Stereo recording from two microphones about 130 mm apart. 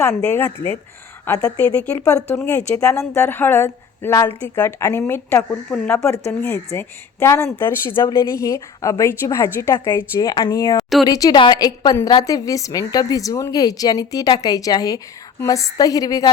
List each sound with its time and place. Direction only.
0.3 s speech: 15° left (ahead or behind)
1.3 s a woman's voice: 25° left (ahead or behind)
1.5 s a woman's voice: 15° left (ahead or behind)
5.7 s speech: 10° left (ahead or behind)
6.7 s a woman's voice: 20° left (ahead or behind)
10.2 s a woman's voice: 35° left (ahead or behind)
10.8 s a woman's voice: centre (ahead or behind)
11.0 s a woman's voice: 30° left (ahead or behind)